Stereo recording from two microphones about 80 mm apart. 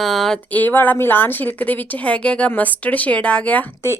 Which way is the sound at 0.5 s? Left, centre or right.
Left.